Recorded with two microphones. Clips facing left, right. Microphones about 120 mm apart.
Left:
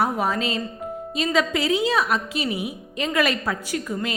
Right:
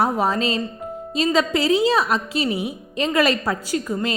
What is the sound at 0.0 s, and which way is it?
A woman's voice, 35° right (ahead or behind).